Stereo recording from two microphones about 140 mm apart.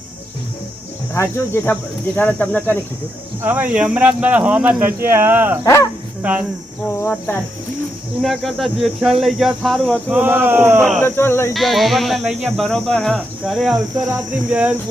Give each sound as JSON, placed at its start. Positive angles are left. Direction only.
{"t": 1.1, "sound": "speech", "side_deg": 15}
{"t": 3.4, "sound": "speech", "side_deg": -10}
{"t": 5.6, "sound": "speech", "side_deg": 20}
{"t": 6.2, "sound": "speech", "side_deg": -10}
{"t": 6.9, "sound": "speech", "side_deg": 15}
{"t": 8.2, "sound": "speech", "side_deg": 0}
{"t": 10.1, "sound": "speech", "side_deg": -10}
{"t": 10.8, "sound": "speech", "side_deg": 0}
{"t": 11.0, "sound": "speech", "side_deg": 15}
{"t": 11.5, "sound": "speech", "side_deg": 0}